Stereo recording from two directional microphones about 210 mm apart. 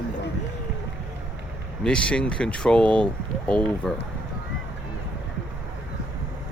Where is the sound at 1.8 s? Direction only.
5° left (ahead or behind).